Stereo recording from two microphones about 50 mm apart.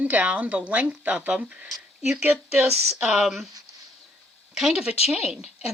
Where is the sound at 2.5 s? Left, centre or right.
Right.